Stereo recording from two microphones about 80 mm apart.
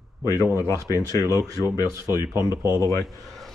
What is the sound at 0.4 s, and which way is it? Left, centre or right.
Speech, left.